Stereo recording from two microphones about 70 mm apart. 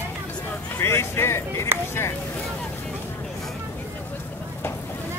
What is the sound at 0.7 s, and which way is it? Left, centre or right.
Speech, left.